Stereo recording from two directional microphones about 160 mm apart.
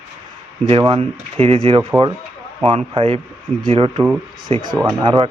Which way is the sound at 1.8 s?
20° right (ahead or behind).